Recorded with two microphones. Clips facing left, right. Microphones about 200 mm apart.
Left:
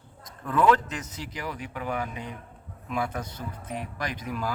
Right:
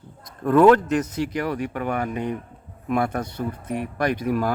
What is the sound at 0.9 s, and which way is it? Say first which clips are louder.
Speech: right 14 dB; 65° right (ahead or behind).